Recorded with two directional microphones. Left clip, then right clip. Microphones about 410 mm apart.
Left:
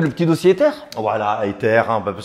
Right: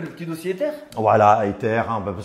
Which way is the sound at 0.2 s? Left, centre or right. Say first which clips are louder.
Left 11 dB; left.